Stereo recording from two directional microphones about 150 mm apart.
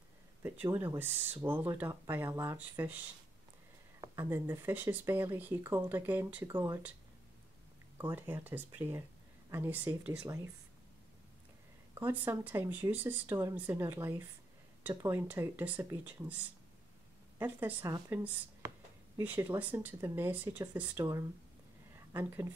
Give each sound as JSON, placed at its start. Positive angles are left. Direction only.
{"t": 0.4, "sound": "speech", "side_deg": -15}
{"t": 4.0, "sound": "speech", "side_deg": -20}
{"t": 8.0, "sound": "speech", "side_deg": -15}
{"t": 11.9, "sound": "speech", "side_deg": -15}
{"t": 17.4, "sound": "speech", "side_deg": -10}